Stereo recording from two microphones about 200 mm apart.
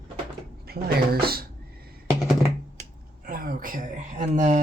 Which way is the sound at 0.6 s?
50° right (ahead or behind).